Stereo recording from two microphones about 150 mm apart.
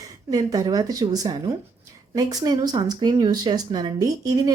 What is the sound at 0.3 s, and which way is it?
Speech, 25° right (ahead or behind).